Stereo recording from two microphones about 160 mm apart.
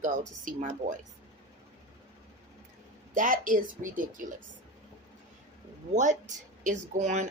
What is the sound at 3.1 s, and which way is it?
A woman's voice, 55° right (ahead or behind).